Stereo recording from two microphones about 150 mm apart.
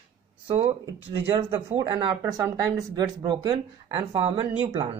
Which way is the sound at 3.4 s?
35° right (ahead or behind).